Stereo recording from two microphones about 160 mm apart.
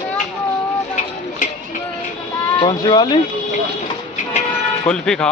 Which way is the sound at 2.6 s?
25° left (ahead or behind).